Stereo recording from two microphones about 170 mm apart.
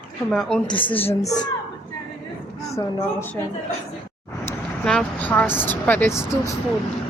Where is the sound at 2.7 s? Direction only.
15° left (ahead or behind).